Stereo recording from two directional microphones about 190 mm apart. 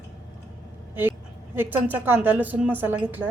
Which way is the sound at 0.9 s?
10° right (ahead or behind).